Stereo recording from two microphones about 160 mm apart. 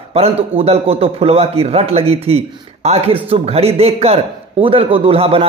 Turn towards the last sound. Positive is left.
turn(degrees=-35)  # may be behind; listen again after turning